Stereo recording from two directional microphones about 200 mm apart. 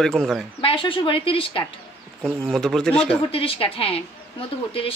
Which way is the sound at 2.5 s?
Centre (ahead or behind).